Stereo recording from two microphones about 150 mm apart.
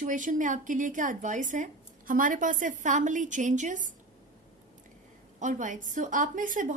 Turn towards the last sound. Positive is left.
turn(degrees=-60)  # may be behind; listen again after turning